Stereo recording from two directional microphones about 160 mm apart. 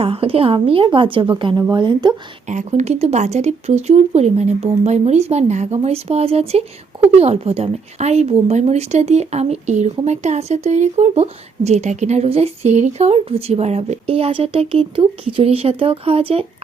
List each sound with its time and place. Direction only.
0.0 s speech: 35° right (ahead or behind)
2.5 s speech: 50° right (ahead or behind)